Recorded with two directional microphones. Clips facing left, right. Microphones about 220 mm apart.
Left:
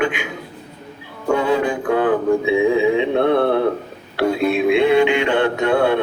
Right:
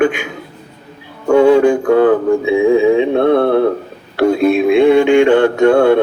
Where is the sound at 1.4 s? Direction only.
30° right (ahead or behind).